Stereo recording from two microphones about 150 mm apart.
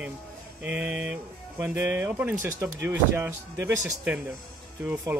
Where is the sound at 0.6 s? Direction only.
10° right (ahead or behind).